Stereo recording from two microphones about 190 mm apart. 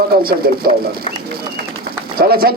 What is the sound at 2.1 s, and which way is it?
Speech, 55° right (ahead or behind).